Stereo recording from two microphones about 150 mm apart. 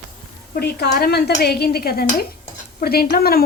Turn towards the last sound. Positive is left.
turn(degrees=85)